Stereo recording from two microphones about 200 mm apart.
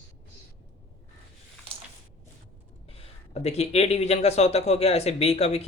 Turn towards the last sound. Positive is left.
turn(degrees=30)  # may be behind; listen again after turning